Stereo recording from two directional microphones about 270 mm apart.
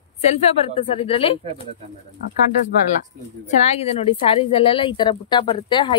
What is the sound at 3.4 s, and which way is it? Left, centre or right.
Speech, left.